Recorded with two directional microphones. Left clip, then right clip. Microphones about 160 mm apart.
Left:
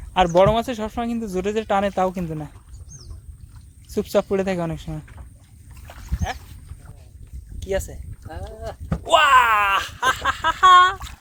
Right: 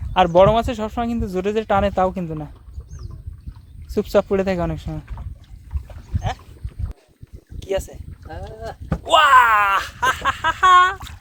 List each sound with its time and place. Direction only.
0.1 s speech: 10° right (ahead or behind)
3.9 s speech: 15° right (ahead or behind)
6.2 s a sound: 15° right (ahead or behind)
7.6 s speech: 10° right (ahead or behind)
8.6 s a sound: 30° right (ahead or behind)
9.0 s speech: 5° right (ahead or behind)